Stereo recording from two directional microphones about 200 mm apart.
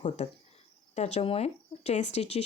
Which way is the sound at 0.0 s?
30° left (ahead or behind).